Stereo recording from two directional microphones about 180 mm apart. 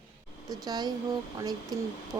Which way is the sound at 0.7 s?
25° right (ahead or behind).